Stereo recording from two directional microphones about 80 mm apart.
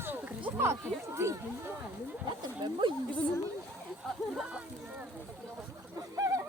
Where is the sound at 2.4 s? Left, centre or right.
Right.